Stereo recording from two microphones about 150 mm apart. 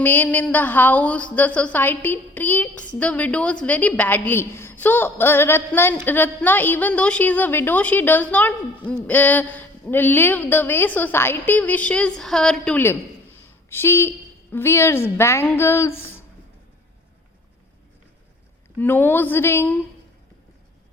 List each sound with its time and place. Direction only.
0.0 s a woman's voice: 10° left (ahead or behind)
18.8 s speech: 15° left (ahead or behind)